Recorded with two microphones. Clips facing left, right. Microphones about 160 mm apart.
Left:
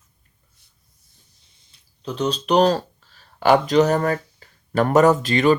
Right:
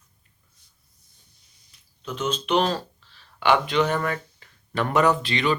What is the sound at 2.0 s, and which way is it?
Speech, 35° left (ahead or behind).